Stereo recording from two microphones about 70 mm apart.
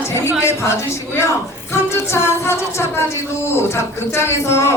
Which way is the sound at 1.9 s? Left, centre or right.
Left.